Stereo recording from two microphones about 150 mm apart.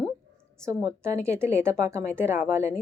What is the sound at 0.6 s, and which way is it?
A woman's voice, 20° right (ahead or behind).